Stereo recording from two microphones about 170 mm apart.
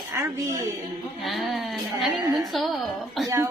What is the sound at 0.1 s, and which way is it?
Speech, 15° right (ahead or behind).